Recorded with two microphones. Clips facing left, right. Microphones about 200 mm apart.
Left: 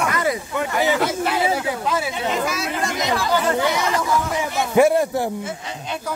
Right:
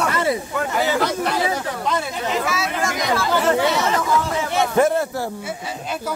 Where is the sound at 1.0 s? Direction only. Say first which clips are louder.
Even; 5° left (ahead or behind).